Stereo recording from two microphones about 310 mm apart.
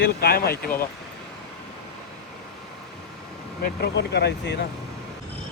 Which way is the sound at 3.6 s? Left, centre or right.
Left.